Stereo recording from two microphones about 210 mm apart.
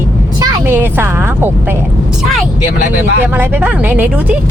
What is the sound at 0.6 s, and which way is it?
A woman's voice, 10° right (ahead or behind).